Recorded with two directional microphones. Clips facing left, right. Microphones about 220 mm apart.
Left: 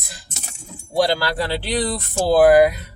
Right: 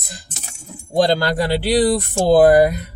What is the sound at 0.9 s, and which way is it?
Speech, 20° right (ahead or behind).